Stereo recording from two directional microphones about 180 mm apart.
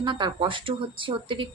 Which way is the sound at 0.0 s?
25° right (ahead or behind).